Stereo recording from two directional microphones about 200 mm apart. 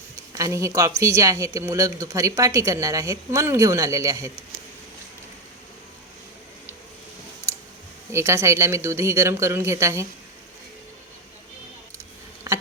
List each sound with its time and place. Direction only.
0.3 s speech: 15° right (ahead or behind)
8.1 s speech: 15° right (ahead or behind)